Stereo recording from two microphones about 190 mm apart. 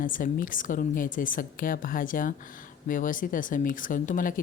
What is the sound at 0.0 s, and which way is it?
A woman's voice, 45° left (ahead or behind).